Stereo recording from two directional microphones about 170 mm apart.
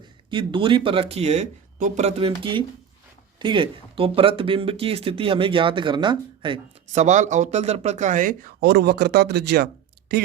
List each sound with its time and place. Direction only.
0.3 s speech: 30° right (ahead or behind)
6.8 s speech: 45° right (ahead or behind); by 9.6 s 70° right (ahead or behind)